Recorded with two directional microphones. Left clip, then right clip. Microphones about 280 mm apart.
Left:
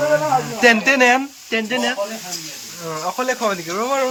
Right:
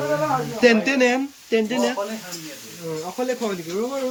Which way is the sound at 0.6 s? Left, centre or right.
Centre.